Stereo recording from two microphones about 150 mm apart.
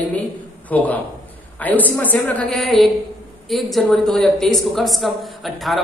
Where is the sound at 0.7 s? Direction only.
10° left (ahead or behind).